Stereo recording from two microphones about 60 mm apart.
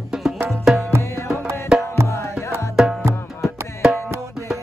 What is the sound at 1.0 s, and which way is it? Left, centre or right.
Music, left.